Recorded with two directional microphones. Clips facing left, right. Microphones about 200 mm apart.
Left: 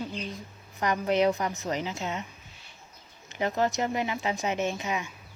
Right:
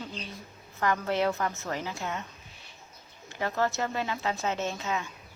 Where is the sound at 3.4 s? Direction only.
15° left (ahead or behind).